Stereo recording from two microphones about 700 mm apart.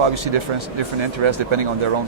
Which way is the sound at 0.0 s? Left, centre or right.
Right.